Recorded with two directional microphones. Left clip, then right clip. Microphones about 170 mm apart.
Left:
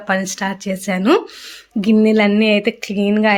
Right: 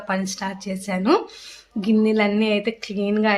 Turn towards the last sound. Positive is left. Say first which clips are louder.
# left 5 dB
turn(degrees=35)  # may be behind; listen again after turning